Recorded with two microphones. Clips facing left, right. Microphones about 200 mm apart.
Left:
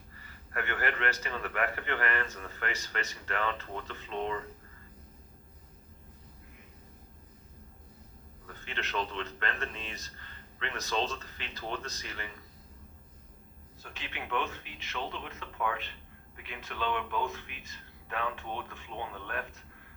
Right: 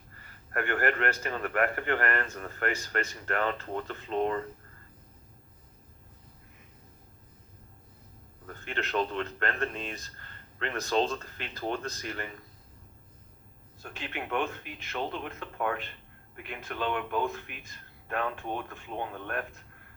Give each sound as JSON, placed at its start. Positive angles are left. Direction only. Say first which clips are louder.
{"t": 0.5, "sound": "a man's voice", "louder": "right 5 dB", "side_deg": -50}
{"t": 8.6, "sound": "a man's voice", "louder": "right 5 dB", "side_deg": -50}
{"t": 13.8, "sound": "a man's voice", "louder": "right 5 dB", "side_deg": -50}